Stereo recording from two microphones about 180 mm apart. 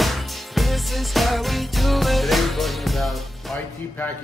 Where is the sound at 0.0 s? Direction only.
Centre (ahead or behind).